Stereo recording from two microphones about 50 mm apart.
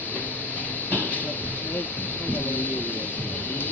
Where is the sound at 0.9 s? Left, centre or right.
Left.